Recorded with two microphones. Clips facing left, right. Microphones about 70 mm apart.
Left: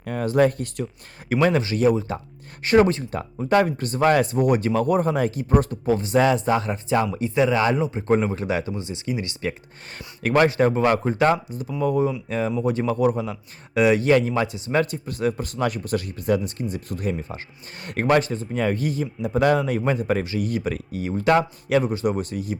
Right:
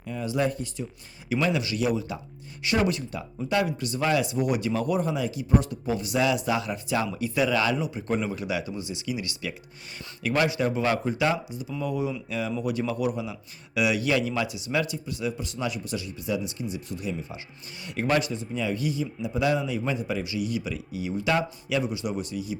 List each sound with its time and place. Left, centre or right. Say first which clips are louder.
0.0 s speech: left 7 dB; left
1.3 s speech: left 6 dB; left